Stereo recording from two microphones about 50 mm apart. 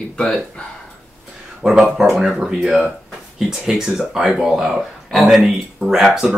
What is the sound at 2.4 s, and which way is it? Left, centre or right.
Speech, centre.